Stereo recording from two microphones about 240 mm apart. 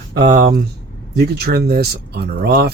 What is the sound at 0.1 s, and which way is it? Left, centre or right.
Speech, right.